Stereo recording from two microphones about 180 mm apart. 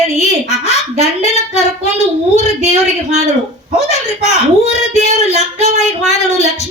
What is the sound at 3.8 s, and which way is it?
A woman's voice, 35° left (ahead or behind).